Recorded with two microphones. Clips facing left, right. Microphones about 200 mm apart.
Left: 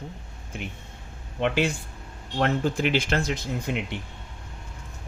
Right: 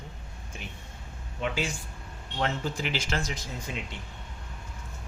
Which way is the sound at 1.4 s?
65° left (ahead or behind).